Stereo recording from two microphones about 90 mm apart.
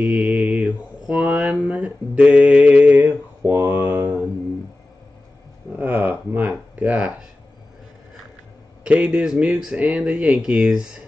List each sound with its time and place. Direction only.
0.0 s speech: 5° right (ahead or behind)
0.4 s mantra: 15° right (ahead or behind)
1.7 s speech: 15° right (ahead or behind)
2.4 s mantra: 5° right (ahead or behind)
2.7 s mantra: 15° right (ahead or behind)
5.7 s a sound: 20° right (ahead or behind)
8.8 s speech: 10° right (ahead or behind)